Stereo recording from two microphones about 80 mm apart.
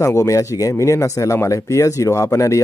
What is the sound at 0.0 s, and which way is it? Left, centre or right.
Speech, left.